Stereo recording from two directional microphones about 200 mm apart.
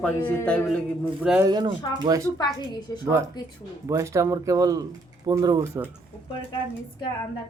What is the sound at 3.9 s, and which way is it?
Speech, 15° right (ahead or behind).